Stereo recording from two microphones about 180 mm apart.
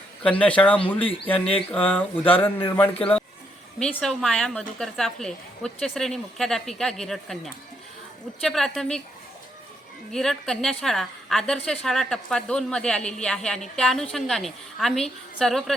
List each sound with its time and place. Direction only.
0.2 s speech: 5° left (ahead or behind)
0.9 s speech: 30° left (ahead or behind)
1.9 s a woman's voice: 10° left (ahead or behind)
10.1 s a woman's voice: centre (ahead or behind)